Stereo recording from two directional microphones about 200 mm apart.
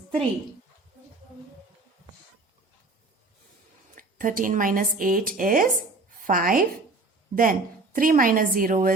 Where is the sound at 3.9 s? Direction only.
40° right (ahead or behind).